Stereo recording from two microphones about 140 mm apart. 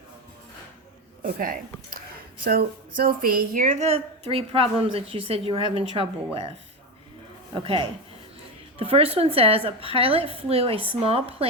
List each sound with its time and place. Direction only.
1.2 s speech: 90° right
3.0 s a woman's voice: 90° right; by 6.5 s 45° right (ahead or behind)
7.5 s a woman's voice: 40° right (ahead or behind)